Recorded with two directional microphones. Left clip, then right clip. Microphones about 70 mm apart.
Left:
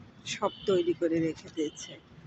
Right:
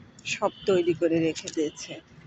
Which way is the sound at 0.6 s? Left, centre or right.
Right.